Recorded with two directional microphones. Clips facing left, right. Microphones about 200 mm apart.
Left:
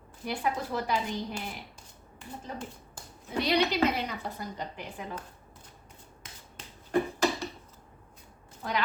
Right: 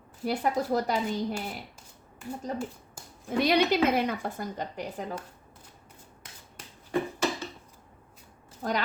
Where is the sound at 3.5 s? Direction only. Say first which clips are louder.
Right 2 dB; 50° right (ahead or behind).